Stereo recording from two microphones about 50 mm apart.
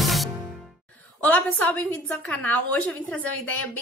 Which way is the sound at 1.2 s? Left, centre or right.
Left.